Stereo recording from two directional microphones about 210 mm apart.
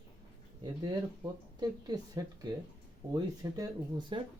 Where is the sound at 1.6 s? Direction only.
20° right (ahead or behind).